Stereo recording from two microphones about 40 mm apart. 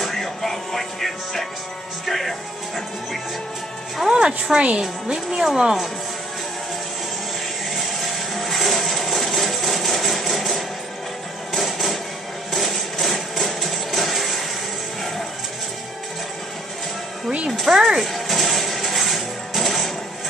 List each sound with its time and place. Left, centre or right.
0.0 s music: centre
2.0 s speech: centre
4.1 s speech: centre
5.1 s speech: centre
7.7 s a sound: centre
12.5 s music: centre
17.6 s music: centre
18.0 s music: centre